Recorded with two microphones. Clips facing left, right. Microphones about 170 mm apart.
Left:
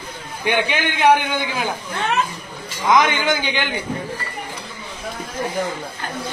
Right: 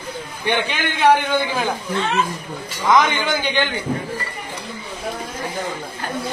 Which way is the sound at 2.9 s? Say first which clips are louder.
Even; 15° left (ahead or behind).